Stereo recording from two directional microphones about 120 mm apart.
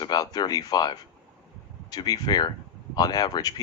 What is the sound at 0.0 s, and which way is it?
Speech, 35° left (ahead or behind).